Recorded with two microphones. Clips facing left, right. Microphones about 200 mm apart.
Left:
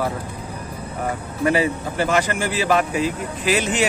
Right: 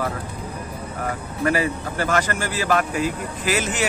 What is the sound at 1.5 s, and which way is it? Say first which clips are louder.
Speech: left 3 dB; 15° left (ahead or behind).